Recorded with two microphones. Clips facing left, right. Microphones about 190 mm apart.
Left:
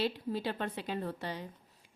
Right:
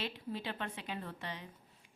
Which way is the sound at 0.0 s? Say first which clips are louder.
Left 7 dB; 40° left (ahead or behind).